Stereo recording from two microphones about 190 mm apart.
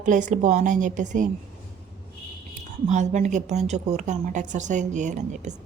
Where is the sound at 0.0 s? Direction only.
40° right (ahead or behind).